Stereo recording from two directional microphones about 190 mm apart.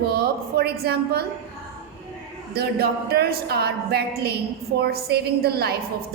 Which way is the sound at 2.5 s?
55° right (ahead or behind).